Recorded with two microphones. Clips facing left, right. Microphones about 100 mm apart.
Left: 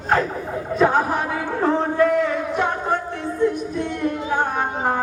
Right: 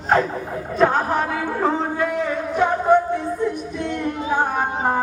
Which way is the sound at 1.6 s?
5° right (ahead or behind).